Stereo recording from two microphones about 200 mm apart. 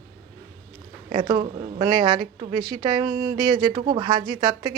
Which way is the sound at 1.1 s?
20° right (ahead or behind).